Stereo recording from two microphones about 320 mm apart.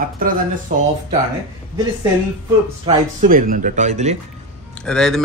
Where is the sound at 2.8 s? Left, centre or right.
Right.